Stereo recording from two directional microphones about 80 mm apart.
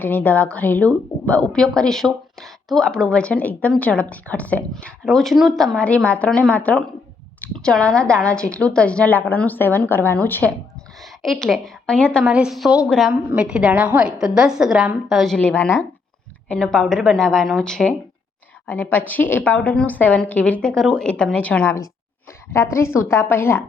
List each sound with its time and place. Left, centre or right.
0.0 s a woman's voice: left
11.0 s a woman's voice: centre
12.3 s a woman's voice: centre
15.4 s a woman's voice: centre
18.7 s a woman's voice: left
22.5 s a woman's voice: left